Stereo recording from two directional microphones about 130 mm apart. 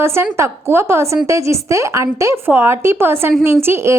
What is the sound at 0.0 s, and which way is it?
A woman's voice, 20° right (ahead or behind).